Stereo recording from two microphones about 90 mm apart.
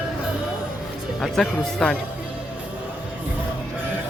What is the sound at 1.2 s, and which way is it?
Speech, 5° left (ahead or behind).